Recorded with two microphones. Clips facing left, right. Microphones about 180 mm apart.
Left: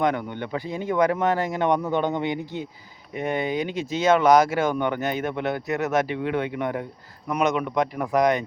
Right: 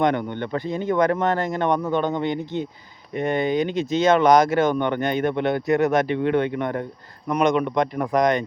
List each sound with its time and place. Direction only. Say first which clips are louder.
0.3 s speech: right 3 dB; 10° left (ahead or behind)